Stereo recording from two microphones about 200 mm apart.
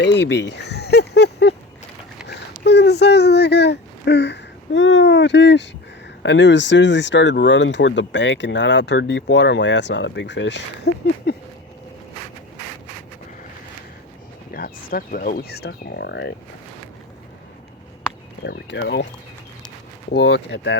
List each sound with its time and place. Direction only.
0.0 s a sound: 60° left (ahead or behind)
2.2 s speech: 55° left (ahead or behind)
11.3 s a sound: 55° left (ahead or behind)
14.5 s speech: 50° left (ahead or behind)
18.4 s speech: 60° left (ahead or behind)
20.1 s speech: 60° left (ahead or behind)